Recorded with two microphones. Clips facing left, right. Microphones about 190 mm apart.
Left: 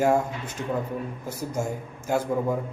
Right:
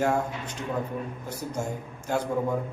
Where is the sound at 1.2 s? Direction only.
10° left (ahead or behind).